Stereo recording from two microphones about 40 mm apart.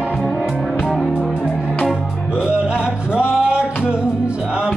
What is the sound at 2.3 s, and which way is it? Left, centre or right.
Music, right.